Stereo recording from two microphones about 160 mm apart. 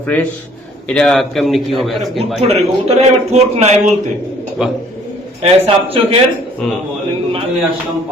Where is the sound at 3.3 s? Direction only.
45° right (ahead or behind).